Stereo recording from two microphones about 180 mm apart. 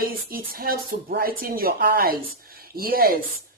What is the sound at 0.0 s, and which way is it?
A woman's voice, 55° right (ahead or behind).